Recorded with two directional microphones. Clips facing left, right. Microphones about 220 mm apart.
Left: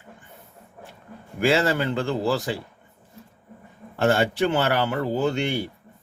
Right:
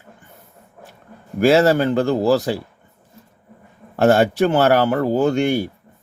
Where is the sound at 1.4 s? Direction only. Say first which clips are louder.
Right 7 dB; 40° right (ahead or behind).